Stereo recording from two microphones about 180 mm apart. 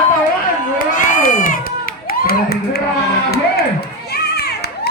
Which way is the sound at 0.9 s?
50° left (ahead or behind).